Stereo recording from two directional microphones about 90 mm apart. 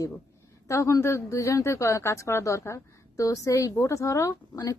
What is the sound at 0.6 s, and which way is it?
A woman's voice, 35° left (ahead or behind).